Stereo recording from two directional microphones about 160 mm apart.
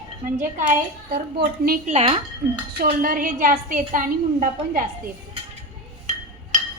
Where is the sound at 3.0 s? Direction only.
60° right (ahead or behind).